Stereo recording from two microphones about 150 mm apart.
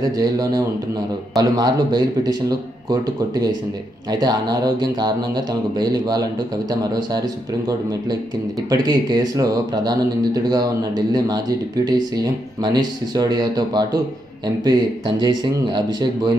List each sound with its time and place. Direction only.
0.2 s speech: 25° right (ahead or behind)